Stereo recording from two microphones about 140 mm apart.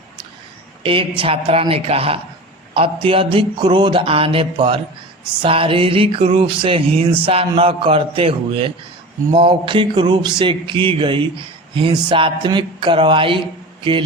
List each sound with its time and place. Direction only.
0.8 s a woman's voice: 40° right (ahead or behind)